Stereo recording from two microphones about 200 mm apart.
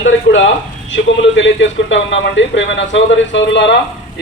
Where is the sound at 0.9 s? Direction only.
65° left (ahead or behind).